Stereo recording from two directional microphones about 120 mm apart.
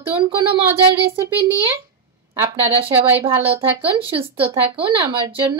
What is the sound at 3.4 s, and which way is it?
Speech, 50° right (ahead or behind).